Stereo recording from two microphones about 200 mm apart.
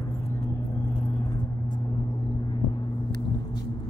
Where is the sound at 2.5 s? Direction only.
20° left (ahead or behind).